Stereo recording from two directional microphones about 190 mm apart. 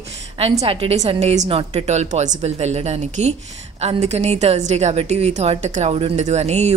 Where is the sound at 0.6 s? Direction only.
30° right (ahead or behind).